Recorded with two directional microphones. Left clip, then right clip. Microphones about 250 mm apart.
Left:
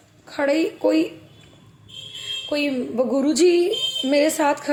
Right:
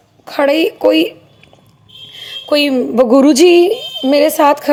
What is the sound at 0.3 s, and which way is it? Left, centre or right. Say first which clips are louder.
Speech: right 9 dB; right.